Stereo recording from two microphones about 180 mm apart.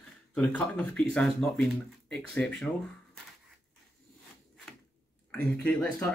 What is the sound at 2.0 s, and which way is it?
Speech, 5° left (ahead or behind).